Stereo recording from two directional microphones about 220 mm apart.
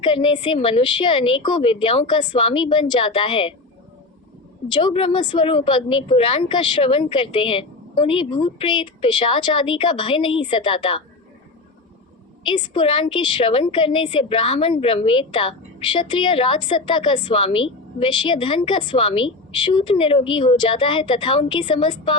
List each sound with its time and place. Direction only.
0.0 s a woman's voice: 20° left (ahead or behind)
4.7 s a woman's voice: 20° left (ahead or behind)
12.5 s a woman's voice: 20° left (ahead or behind)